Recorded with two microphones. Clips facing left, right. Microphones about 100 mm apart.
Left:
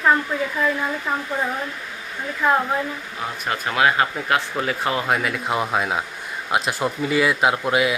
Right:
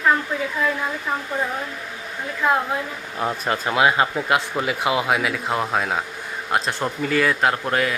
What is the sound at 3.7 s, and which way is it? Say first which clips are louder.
Speech: even; 20° right (ahead or behind).